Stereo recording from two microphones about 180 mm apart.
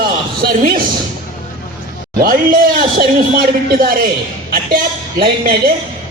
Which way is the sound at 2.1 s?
55° right (ahead or behind).